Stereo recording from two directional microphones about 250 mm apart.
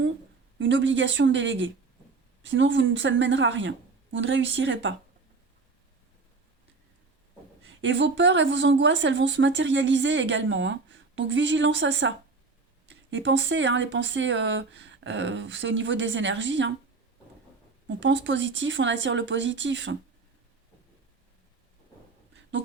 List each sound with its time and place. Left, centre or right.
0.6 s speech: right
7.6 s speech: right
17.8 s speech: right